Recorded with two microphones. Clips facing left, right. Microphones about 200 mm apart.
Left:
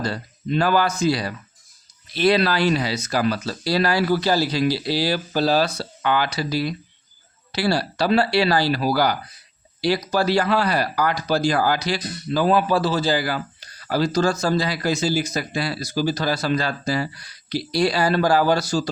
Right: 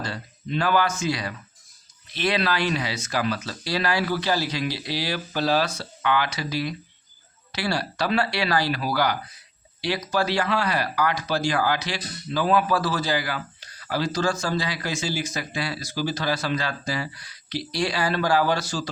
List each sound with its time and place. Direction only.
0.0 s speech: 40° left (ahead or behind)